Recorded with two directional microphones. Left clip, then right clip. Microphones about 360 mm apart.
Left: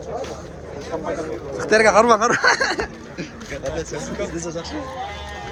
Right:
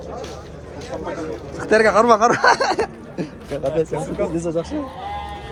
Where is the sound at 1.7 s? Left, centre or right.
Centre.